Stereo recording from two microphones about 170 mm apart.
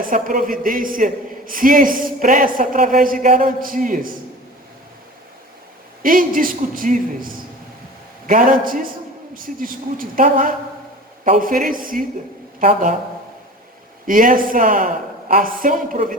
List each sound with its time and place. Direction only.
0.0 s a man's voice: 55° right (ahead or behind)
6.0 s a man's voice: 55° right (ahead or behind)
8.3 s a man's voice: 55° right (ahead or behind)
14.1 s a man's voice: 55° right (ahead or behind)